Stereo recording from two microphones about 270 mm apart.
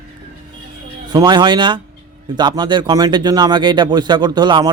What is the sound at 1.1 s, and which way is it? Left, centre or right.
Speech, centre.